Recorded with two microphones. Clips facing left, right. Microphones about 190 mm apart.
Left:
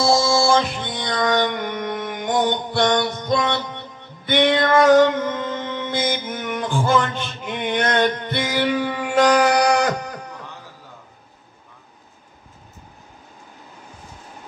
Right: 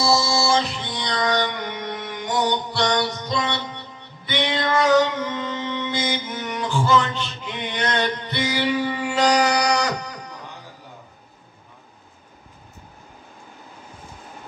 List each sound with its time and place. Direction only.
0.0 s music: 50° left (ahead or behind)